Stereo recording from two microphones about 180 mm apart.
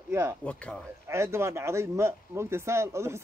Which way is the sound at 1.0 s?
15° right (ahead or behind).